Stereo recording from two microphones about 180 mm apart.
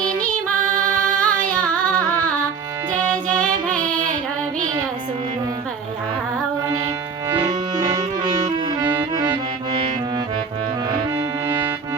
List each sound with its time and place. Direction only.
0.2 s music: 5° left (ahead or behind)
1.2 s singing: 5° left (ahead or behind)
3.4 s music: 5° left (ahead or behind)
7.3 s music: 20° right (ahead or behind)
11.4 s music: 15° right (ahead or behind)